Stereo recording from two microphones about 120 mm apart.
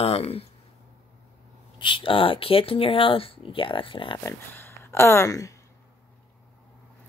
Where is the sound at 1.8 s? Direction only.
45° left (ahead or behind).